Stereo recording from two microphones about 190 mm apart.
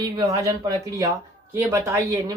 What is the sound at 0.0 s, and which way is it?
A man's voice, 20° right (ahead or behind).